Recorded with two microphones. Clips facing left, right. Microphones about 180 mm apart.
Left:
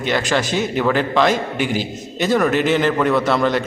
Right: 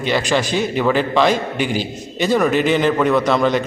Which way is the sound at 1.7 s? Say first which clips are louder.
Even; 45° left (ahead or behind).